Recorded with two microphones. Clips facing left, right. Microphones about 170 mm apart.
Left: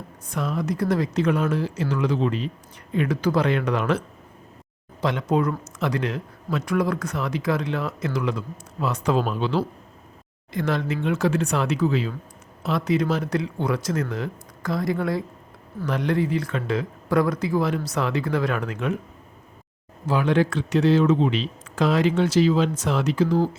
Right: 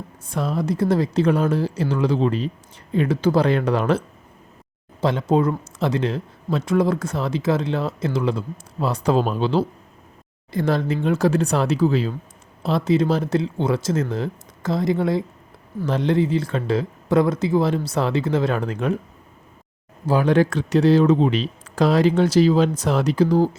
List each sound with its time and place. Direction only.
0.3 s speech: 30° right (ahead or behind)
20.1 s speech: 40° right (ahead or behind)